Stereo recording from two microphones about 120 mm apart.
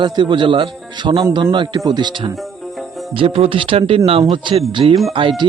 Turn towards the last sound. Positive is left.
turn(degrees=-45)  # may be behind; listen again after turning